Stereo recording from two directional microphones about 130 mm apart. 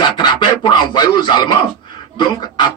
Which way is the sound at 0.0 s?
35° left (ahead or behind).